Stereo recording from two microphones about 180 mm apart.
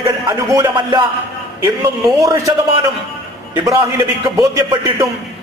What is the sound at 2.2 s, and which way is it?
Speech, 20° right (ahead or behind).